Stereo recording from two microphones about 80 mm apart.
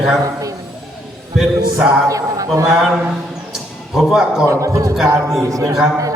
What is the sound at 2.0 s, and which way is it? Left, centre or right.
Speech, right.